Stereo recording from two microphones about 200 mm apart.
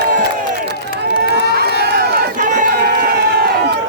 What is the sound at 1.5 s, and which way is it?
Crowd, 55° right (ahead or behind).